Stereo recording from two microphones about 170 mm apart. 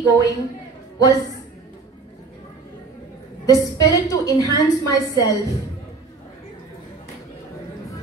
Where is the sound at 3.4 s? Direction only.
20° left (ahead or behind).